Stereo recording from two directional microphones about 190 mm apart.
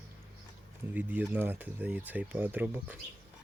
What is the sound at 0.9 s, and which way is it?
Speech, 10° right (ahead or behind).